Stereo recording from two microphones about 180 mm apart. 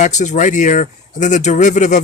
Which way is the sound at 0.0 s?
40° left (ahead or behind).